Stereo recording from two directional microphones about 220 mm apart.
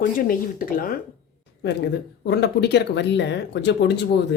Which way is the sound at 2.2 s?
50° left (ahead or behind).